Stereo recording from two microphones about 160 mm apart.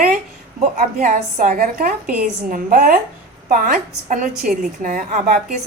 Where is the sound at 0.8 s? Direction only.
55° right (ahead or behind).